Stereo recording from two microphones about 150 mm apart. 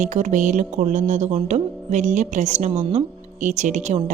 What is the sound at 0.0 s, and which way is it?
A woman's voice, 50° right (ahead or behind).